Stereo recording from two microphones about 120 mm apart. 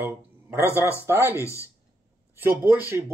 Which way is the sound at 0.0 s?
20° right (ahead or behind).